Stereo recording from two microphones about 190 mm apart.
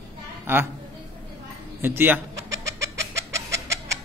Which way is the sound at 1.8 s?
10° right (ahead or behind).